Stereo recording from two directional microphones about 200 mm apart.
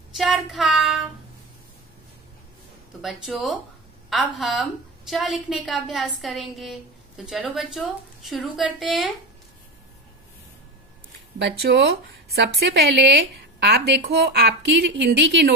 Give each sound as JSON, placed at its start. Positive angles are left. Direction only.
{"t": 0.1, "sound": "a woman's voice", "side_deg": 0}
{"t": 3.0, "sound": "a woman's voice", "side_deg": 0}
{"t": 12.4, "sound": "a woman's voice", "side_deg": -50}